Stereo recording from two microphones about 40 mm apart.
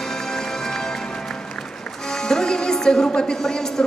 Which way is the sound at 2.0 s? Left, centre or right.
Centre.